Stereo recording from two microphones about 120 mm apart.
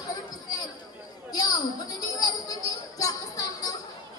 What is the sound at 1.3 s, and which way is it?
Chatter, 30° left (ahead or behind).